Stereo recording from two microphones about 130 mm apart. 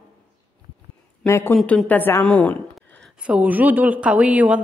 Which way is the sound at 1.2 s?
20° left (ahead or behind).